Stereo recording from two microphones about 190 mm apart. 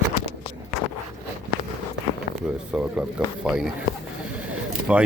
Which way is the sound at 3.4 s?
5° right (ahead or behind).